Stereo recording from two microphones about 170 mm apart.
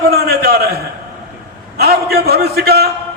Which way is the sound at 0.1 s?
65° right (ahead or behind).